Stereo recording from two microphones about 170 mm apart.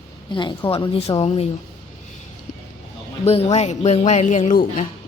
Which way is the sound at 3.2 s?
40° left (ahead or behind).